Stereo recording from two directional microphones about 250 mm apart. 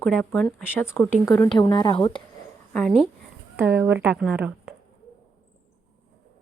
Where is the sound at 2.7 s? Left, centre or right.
Centre.